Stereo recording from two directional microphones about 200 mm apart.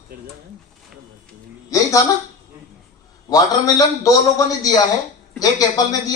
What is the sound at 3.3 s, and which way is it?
A man's voice, 20° left (ahead or behind).